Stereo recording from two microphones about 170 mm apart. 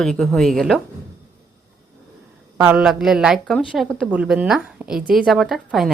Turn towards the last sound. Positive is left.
turn(degrees=0)  # may be behind; listen again after turning